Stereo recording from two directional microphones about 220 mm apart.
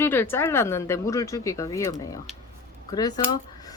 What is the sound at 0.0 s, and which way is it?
Speech, 10° left (ahead or behind).